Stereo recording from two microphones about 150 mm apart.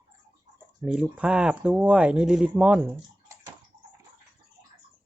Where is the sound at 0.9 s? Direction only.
5° right (ahead or behind).